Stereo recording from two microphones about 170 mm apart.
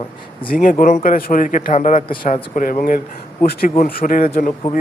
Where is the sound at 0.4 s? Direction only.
55° left (ahead or behind).